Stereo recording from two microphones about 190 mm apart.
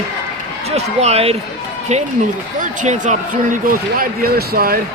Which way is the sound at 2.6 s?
40° right (ahead or behind).